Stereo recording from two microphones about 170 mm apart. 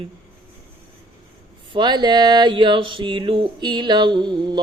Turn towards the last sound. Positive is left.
turn(degrees=-25)  # may be behind; listen again after turning